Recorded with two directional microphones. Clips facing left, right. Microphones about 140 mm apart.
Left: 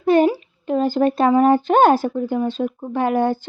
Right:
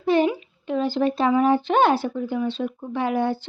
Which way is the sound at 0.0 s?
50° left (ahead or behind).